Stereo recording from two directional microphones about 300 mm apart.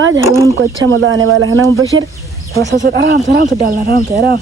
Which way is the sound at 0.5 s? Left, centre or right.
Right.